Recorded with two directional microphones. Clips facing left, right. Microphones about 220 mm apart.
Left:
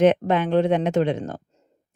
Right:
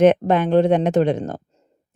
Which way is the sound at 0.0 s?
45° right (ahead or behind).